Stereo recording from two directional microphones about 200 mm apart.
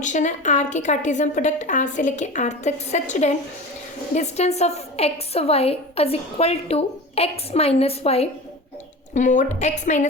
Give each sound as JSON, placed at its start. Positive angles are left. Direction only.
{"t": 0.0, "sound": "a woman's voice", "side_deg": 35}